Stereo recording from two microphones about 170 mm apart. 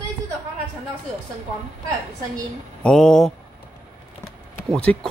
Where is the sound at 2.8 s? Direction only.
5° left (ahead or behind).